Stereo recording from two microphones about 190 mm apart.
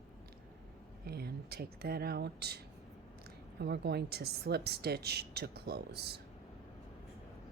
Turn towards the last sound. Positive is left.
turn(degrees=-60)  # may be behind; listen again after turning